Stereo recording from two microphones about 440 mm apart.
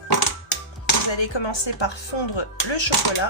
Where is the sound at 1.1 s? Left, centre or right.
Left.